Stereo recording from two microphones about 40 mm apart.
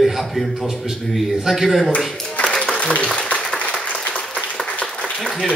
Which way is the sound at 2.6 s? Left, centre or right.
Left.